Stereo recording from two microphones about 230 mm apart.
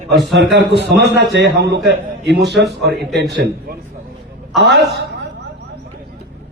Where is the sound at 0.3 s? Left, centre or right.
Right.